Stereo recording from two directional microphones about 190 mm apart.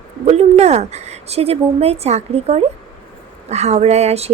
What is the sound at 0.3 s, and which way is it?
A woman's voice, 35° right (ahead or behind).